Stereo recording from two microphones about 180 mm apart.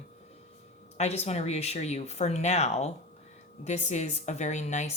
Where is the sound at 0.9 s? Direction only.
35° left (ahead or behind).